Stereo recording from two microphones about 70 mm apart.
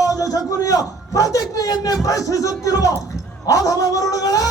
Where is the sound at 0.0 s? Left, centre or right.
Left.